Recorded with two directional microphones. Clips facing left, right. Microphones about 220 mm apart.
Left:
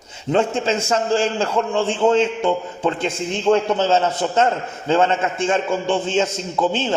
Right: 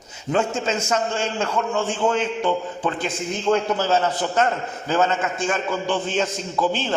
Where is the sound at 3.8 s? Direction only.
25° left (ahead or behind).